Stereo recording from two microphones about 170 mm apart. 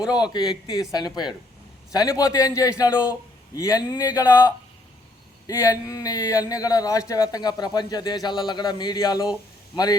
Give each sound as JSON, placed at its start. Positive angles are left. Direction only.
{"t": 0.1, "sound": "speech", "side_deg": 25}
{"t": 5.5, "sound": "speech", "side_deg": 20}